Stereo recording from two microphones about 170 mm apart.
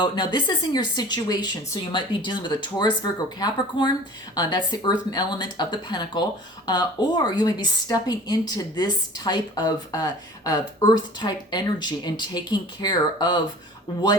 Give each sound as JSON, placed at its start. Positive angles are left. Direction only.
{"t": 0.0, "sound": "a woman's voice", "side_deg": 25}